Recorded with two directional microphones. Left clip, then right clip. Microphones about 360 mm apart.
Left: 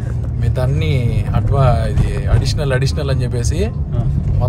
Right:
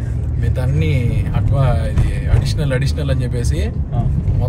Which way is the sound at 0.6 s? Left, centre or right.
Centre.